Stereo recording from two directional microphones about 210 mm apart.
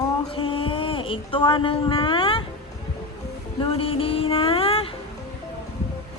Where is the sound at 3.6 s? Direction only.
25° left (ahead or behind).